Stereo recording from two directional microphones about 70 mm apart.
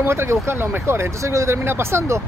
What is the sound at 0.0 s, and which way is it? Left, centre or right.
Speech, right.